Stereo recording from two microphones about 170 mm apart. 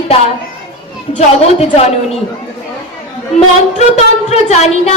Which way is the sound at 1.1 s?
40° left (ahead or behind).